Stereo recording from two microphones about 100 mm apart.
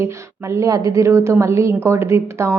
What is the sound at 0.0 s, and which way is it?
A woman's voice, 30° right (ahead or behind).